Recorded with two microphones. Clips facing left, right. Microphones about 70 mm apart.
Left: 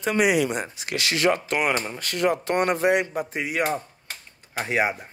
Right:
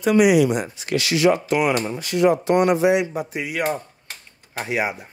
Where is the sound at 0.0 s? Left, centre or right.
Left.